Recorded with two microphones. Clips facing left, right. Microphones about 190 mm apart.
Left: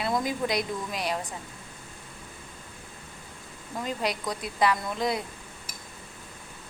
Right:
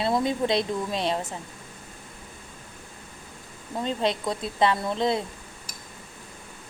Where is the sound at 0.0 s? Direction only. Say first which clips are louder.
Right 4 dB; 25° right (ahead or behind).